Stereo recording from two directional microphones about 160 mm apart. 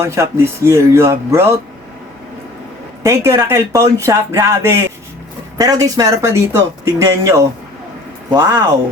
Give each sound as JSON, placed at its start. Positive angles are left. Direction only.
{"t": 0.0, "sound": "speech", "side_deg": -15}
{"t": 3.0, "sound": "speech", "side_deg": -20}